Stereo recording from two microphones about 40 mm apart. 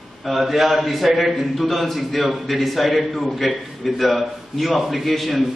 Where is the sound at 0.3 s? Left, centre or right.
Centre.